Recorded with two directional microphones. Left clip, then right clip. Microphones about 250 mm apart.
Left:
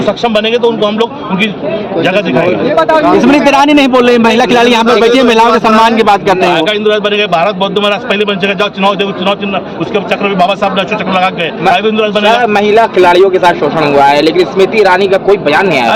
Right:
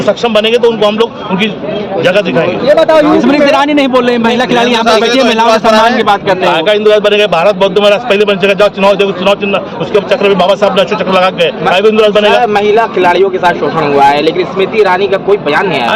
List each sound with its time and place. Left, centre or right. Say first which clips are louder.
0.3 s a man's voice: right 2 dB; centre
3.2 s a man's voice: left 1 dB; left
6.5 s a man's voice: right 2 dB; centre
12.2 s a man's voice: even; left